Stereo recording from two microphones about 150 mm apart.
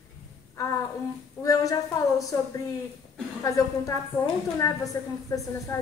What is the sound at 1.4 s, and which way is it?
Speech, 20° left (ahead or behind).